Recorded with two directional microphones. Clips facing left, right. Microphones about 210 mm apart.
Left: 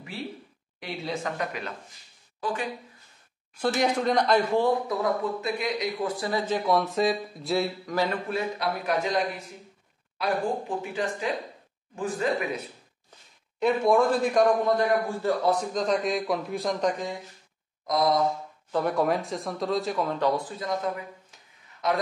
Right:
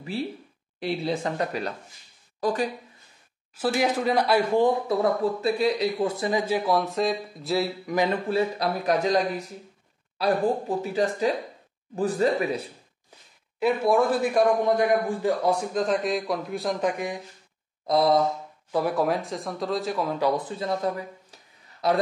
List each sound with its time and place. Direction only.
0.7 s speech: 30° right (ahead or behind)
3.5 s a man's voice: 5° right (ahead or behind)
4.8 s speech: 35° right (ahead or behind); by 7.9 s centre (ahead or behind)
8.3 s speech: 35° right (ahead or behind)
13.6 s a man's voice: 5° right (ahead or behind)
17.8 s speech: 30° right (ahead or behind)
18.7 s a man's voice: 5° right (ahead or behind)
20.4 s a man's voice: 30° right (ahead or behind)